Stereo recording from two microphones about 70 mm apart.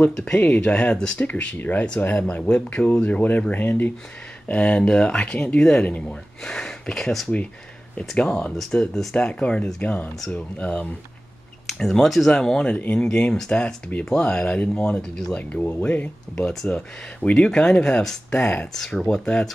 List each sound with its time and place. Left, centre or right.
0.0 s speech: left
4.5 s speech: centre
9.1 s speech: centre
11.6 s speech: centre
15.3 s speech: centre
18.7 s speech: centre